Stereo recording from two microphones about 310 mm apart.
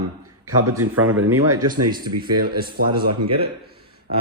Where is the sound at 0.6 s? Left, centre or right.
Right.